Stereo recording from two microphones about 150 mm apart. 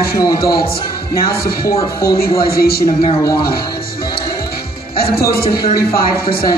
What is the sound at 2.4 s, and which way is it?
Speech, 90° left.